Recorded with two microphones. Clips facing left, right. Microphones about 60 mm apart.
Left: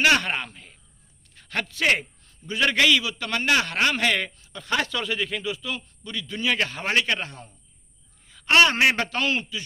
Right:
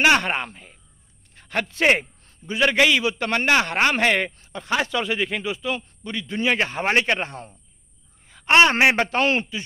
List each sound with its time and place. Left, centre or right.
0.0 s a man's voice: right
1.3 s a sound: right
1.7 s a man's voice: right
3.0 s a man's voice: right
4.6 s a man's voice: centre; by 9.6 s right